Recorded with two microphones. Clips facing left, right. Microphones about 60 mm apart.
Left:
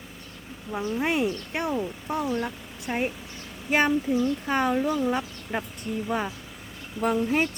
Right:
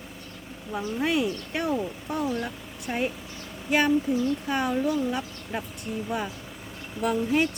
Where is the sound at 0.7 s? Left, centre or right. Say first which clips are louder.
Even; left.